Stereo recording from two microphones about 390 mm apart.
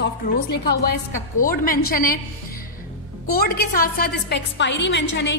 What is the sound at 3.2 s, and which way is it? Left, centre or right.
A woman's voice, left.